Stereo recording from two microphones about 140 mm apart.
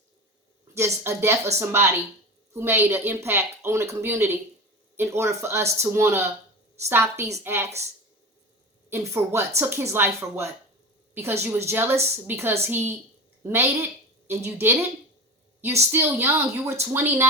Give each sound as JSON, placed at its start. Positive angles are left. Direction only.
{"t": 0.7, "sound": "speech", "side_deg": -20}
{"t": 8.9, "sound": "a woman's voice", "side_deg": -15}
{"t": 15.9, "sound": "speech", "side_deg": -15}